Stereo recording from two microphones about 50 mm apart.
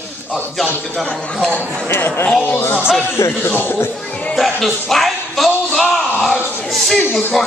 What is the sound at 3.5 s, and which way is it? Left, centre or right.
Speech, left.